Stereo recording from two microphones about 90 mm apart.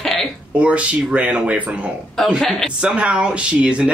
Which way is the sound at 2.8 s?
10° right (ahead or behind).